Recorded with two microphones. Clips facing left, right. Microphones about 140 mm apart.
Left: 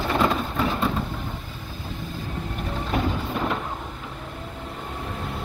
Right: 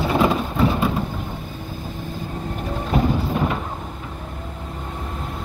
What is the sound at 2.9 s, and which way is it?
Music, 5° right (ahead or behind).